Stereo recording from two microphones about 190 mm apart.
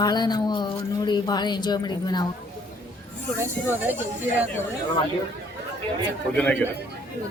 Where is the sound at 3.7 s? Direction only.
10° right (ahead or behind).